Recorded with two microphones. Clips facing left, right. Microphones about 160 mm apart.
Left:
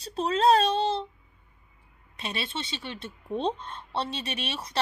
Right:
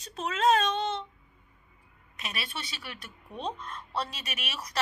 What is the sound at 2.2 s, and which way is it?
Speech, 25° left (ahead or behind).